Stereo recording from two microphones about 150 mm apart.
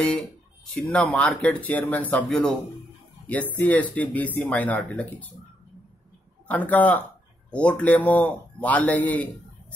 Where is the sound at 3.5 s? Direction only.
10° left (ahead or behind).